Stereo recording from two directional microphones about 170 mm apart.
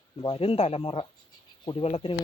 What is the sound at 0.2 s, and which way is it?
Speech, 35° left (ahead or behind).